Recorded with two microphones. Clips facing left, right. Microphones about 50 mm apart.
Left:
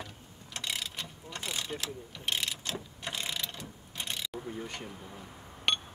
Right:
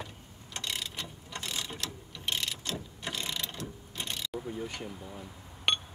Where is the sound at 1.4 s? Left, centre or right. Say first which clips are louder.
Left 1 dB; centre.